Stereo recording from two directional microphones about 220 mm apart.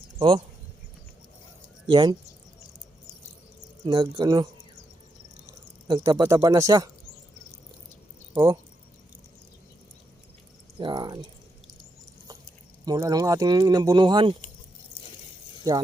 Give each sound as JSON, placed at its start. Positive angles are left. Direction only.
{"t": 0.2, "sound": "speech", "side_deg": -25}
{"t": 1.9, "sound": "speech", "side_deg": -20}
{"t": 3.8, "sound": "speech", "side_deg": -20}
{"t": 5.9, "sound": "speech", "side_deg": -15}
{"t": 8.3, "sound": "speech", "side_deg": -20}
{"t": 10.8, "sound": "speech", "side_deg": -20}
{"t": 12.8, "sound": "speech", "side_deg": -15}